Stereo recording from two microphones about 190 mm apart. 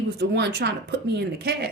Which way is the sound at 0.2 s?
60° right (ahead or behind).